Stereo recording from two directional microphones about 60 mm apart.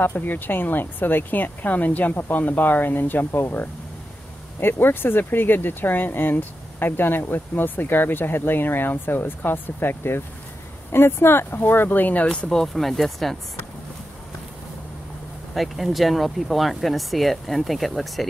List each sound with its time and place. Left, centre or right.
0.3 s speech: left; by 12.6 s centre
12.6 s speech: centre
15.5 s speech: centre